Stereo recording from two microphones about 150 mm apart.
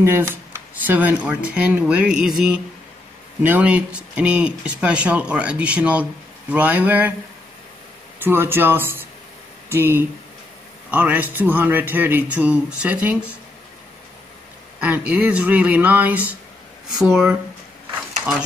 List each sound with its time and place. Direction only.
0.0 s speech: 15° right (ahead or behind)
8.2 s speech: 15° right (ahead or behind)
14.8 s speech: 10° right (ahead or behind)